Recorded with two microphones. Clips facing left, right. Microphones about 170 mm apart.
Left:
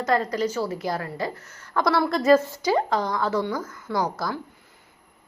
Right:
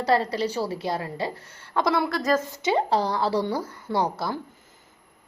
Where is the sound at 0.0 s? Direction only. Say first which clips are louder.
Even; 30° right (ahead or behind).